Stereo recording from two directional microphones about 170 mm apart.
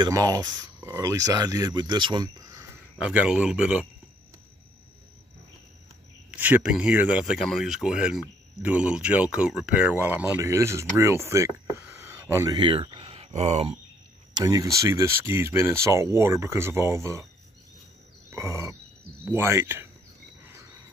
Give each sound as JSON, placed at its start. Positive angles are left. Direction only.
{"t": 0.0, "sound": "speech", "side_deg": -20}
{"t": 3.0, "sound": "speech", "side_deg": -5}
{"t": 6.3, "sound": "speech", "side_deg": -10}
{"t": 13.1, "sound": "speech", "side_deg": -40}
{"t": 14.3, "sound": "speech", "side_deg": -20}
{"t": 18.3, "sound": "speech", "side_deg": -20}